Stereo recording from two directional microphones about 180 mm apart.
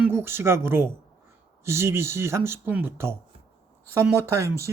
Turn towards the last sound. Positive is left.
turn(degrees=-15)  # may be behind; listen again after turning